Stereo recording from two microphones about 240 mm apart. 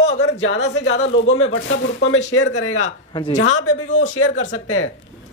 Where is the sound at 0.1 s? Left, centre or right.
Left.